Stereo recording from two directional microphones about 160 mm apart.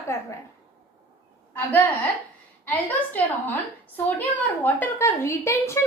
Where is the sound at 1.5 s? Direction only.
10° left (ahead or behind).